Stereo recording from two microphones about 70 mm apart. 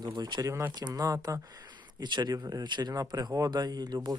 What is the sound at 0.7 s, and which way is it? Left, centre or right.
Speech, right.